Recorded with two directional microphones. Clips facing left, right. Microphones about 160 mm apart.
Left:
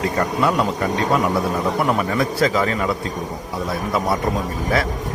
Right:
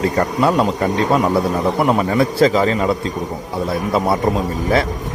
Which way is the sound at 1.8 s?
25° right (ahead or behind).